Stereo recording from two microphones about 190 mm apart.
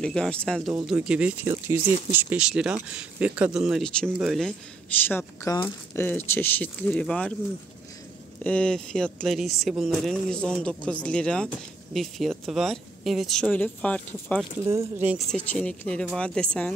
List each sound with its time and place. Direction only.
0.0 s speech: 5° left (ahead or behind)
5.0 s speech: 15° left (ahead or behind)
8.5 s speech: 5° left (ahead or behind)
14.6 s speech: 15° right (ahead or behind)
15.3 s speech: 5° left (ahead or behind)